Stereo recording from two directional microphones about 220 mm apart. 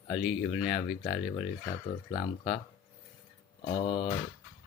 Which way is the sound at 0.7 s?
20° left (ahead or behind).